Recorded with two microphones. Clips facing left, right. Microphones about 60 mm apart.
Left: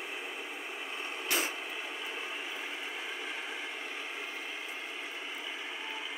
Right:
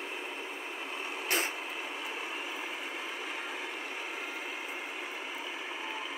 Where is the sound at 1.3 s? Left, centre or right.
Right.